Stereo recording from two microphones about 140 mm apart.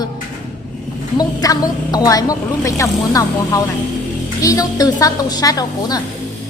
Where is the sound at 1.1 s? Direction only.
25° left (ahead or behind).